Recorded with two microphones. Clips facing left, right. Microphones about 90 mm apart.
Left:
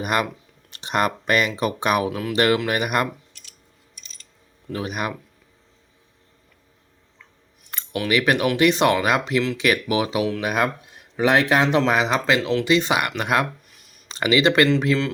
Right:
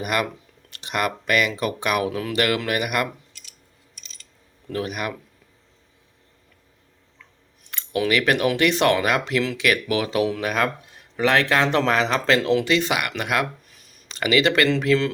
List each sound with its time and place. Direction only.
0.0 s speech: 25° left (ahead or behind)
2.0 s speech: 5° left (ahead or behind)
2.3 s speech: 25° left (ahead or behind)
4.7 s speech: 20° left (ahead or behind)
8.1 s speech: 20° left (ahead or behind)
12.4 s speech: 5° right (ahead or behind)
12.6 s speech: 20° left (ahead or behind)
13.7 s a sound: centre (ahead or behind)
14.1 s speech: 25° left (ahead or behind)